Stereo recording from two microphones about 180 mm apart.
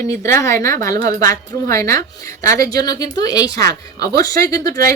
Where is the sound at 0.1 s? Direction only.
15° left (ahead or behind).